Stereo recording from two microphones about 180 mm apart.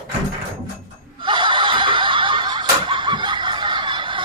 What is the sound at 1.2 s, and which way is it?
Snicker, 25° right (ahead or behind).